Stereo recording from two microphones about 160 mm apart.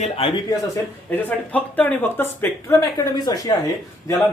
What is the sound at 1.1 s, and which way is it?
Speech, 10° left (ahead or behind).